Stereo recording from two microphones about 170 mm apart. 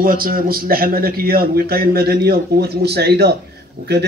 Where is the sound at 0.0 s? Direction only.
55° right (ahead or behind).